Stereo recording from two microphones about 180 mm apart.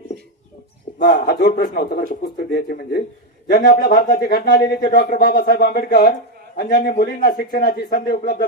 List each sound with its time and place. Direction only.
1.1 s speech: 55° left (ahead or behind)